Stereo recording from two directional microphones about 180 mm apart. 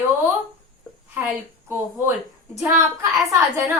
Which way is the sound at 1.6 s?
15° right (ahead or behind).